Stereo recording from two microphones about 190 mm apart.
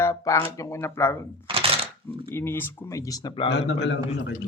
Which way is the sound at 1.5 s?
30° right (ahead or behind).